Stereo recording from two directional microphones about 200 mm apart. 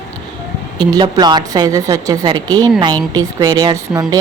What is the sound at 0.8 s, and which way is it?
A woman's voice, 25° right (ahead or behind).